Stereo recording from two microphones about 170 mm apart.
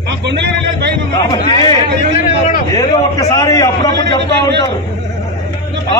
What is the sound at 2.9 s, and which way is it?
A man's voice, 30° left (ahead or behind).